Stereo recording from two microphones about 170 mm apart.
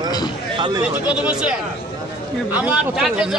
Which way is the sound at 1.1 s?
5° right (ahead or behind).